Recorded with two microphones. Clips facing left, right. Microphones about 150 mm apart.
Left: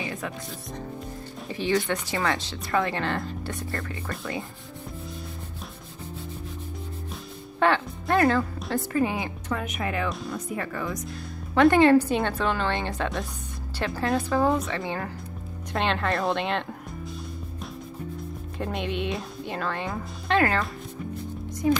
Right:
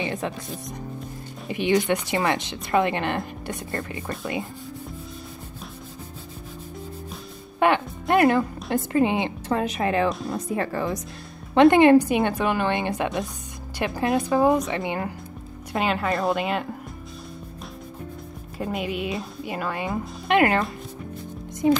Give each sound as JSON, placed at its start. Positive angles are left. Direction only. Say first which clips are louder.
{"t": 0.0, "sound": "a woman's voice", "louder": "right 4 dB", "side_deg": -25}
{"t": 7.5, "sound": "speech", "louder": "right 2 dB", "side_deg": -15}
{"t": 11.5, "sound": "a woman's voice", "louder": "right 3 dB", "side_deg": -20}
{"t": 18.6, "sound": "speech", "louder": "right 2 dB", "side_deg": -5}
{"t": 20.3, "sound": "speech", "louder": "right 4 dB", "side_deg": -20}